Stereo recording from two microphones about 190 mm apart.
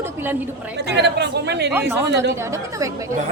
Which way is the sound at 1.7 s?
10° right (ahead or behind).